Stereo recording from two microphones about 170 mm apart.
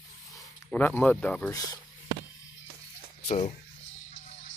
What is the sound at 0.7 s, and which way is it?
Speech, 10° left (ahead or behind).